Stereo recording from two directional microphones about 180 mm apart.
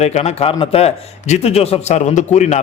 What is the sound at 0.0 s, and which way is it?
A man's voice, 35° left (ahead or behind).